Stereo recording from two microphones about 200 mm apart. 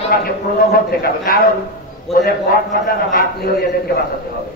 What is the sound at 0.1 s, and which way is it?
A man's voice, 50° left (ahead or behind).